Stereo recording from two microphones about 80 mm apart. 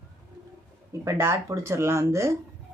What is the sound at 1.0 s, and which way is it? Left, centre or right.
Speech, right.